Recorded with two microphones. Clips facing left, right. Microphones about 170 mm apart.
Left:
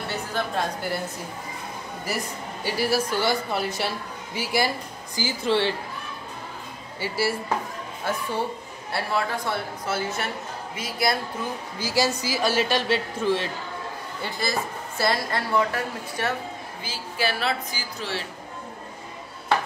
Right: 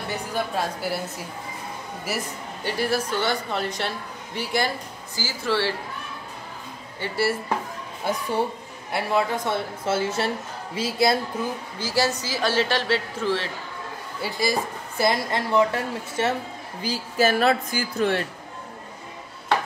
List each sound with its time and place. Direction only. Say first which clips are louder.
0.1 s a woman's voice: right 1 dB; 10° right (ahead or behind)
2.0 s speech: even; centre (ahead or behind)
5.1 s speech: left 2 dB; 20° left (ahead or behind)
7.0 s speech: right 1 dB; centre (ahead or behind)
8.0 s a woman's voice: right 3 dB; 15° right (ahead or behind)
11.8 s speech: even; 10° left (ahead or behind)
14.2 s a woman's voice: right 3 dB; 10° right (ahead or behind)
16.8 s a woman's voice: right 6 dB; 40° right (ahead or behind)